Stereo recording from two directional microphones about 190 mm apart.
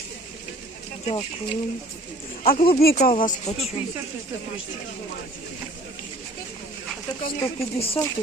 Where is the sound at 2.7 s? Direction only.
55° left (ahead or behind).